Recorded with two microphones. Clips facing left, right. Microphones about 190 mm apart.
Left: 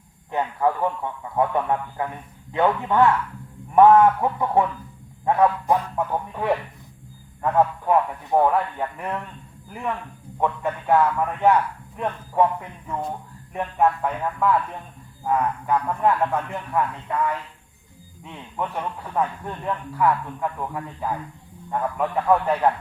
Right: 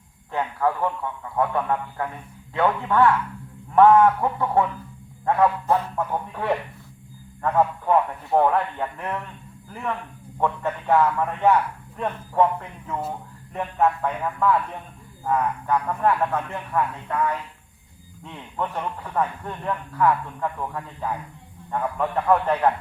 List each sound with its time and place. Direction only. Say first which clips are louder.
0.3 s speech: left 1 dB; 15° left (ahead or behind)
10.4 s speech: even; 10° left (ahead or behind)
18.3 s speech: even; 10° left (ahead or behind)